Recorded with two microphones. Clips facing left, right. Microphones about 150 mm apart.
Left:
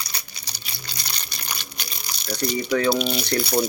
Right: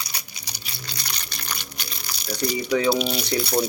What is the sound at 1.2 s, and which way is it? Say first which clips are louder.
Water: even; 15° left (ahead or behind).